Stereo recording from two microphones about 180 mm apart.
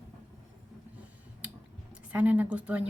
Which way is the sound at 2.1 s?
10° right (ahead or behind).